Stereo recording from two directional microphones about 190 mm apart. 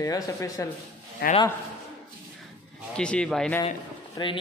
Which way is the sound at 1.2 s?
60° left (ahead or behind).